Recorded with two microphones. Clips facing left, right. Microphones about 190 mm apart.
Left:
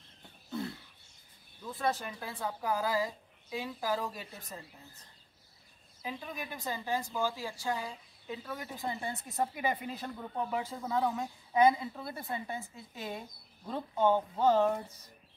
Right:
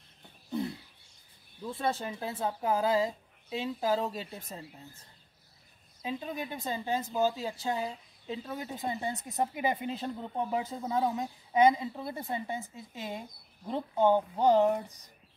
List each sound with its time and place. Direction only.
0.5 s a sound: 20° right (ahead or behind)
1.7 s a woman's voice: 25° right (ahead or behind)
6.0 s a woman's voice: 25° right (ahead or behind)